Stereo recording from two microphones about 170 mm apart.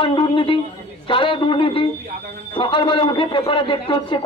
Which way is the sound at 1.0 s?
30° left (ahead or behind).